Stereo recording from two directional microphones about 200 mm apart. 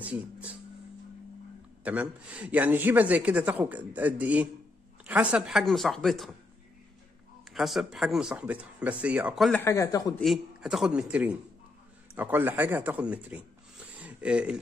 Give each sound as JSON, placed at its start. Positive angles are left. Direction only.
{"t": 0.0, "sound": "a sound", "side_deg": -5}
{"t": 1.9, "sound": "a woman's voice", "side_deg": -5}
{"t": 7.5, "sound": "speech", "side_deg": 0}
{"t": 9.6, "sound": "a man's voice", "side_deg": 15}
{"t": 10.2, "sound": "speech", "side_deg": 0}